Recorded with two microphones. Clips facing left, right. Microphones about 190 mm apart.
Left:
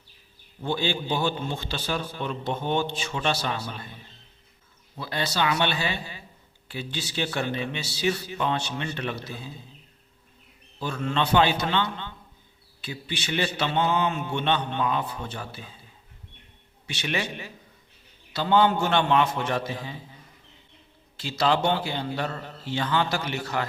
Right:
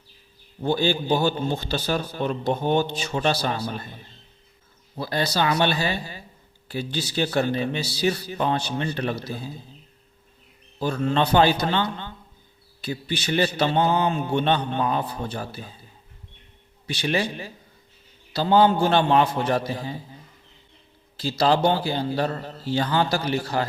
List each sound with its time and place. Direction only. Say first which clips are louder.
0.6 s a man's voice: right 5 dB; 40° right (ahead or behind)
4.9 s a man's voice: right 4 dB; 40° right (ahead or behind)
10.8 s a man's voice: right 5 dB; 40° right (ahead or behind)
16.8 s a man's voice: right 5 dB; 35° right (ahead or behind)
21.2 s a man's voice: right 4 dB; 35° right (ahead or behind)